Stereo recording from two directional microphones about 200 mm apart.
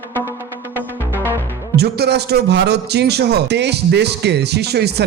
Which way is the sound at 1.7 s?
55° right (ahead or behind).